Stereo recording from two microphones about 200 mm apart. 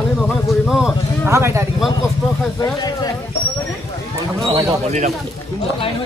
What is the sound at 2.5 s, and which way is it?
Speech, 20° left (ahead or behind).